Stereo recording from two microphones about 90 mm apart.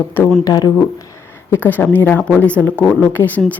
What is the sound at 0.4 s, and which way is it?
Speech, 40° left (ahead or behind).